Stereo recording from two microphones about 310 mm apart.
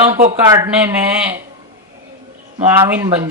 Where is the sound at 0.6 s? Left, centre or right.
Centre.